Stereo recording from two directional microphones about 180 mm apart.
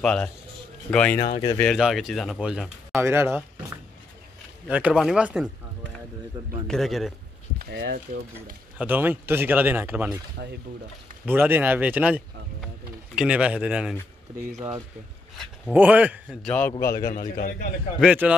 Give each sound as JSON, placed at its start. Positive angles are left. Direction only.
{"t": 0.0, "sound": "a man's voice", "side_deg": 5}
{"t": 1.2, "sound": "speech", "side_deg": 25}
{"t": 1.6, "sound": "speech", "side_deg": 0}
{"t": 3.0, "sound": "a man's voice", "side_deg": -15}
{"t": 4.6, "sound": "speech", "side_deg": -5}
{"t": 6.7, "sound": "speech", "side_deg": 0}
{"t": 7.5, "sound": "speech", "side_deg": -65}
{"t": 8.7, "sound": "a man's voice", "side_deg": -10}
{"t": 11.2, "sound": "a man's voice", "side_deg": -10}
{"t": 15.3, "sound": "a man's voice", "side_deg": -5}
{"t": 16.4, "sound": "a man's voice", "side_deg": 10}
{"t": 16.9, "sound": "a man's voice", "side_deg": 55}
{"t": 18.0, "sound": "a man's voice", "side_deg": -10}